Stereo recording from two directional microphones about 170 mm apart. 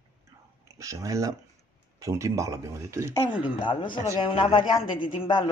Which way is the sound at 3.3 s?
30° left (ahead or behind).